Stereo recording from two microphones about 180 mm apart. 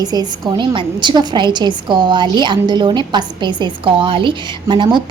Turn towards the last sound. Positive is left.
turn(degrees=-25)  # may be behind; listen again after turning